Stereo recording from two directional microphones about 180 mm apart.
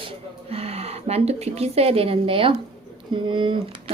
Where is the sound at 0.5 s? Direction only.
35° right (ahead or behind).